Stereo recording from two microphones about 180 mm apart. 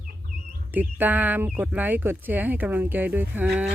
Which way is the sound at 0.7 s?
10° right (ahead or behind).